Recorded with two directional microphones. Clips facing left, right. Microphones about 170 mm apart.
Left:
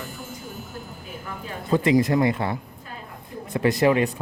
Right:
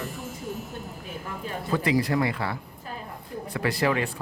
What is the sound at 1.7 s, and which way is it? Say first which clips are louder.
Speech: left 5 dB; 20° left (ahead or behind).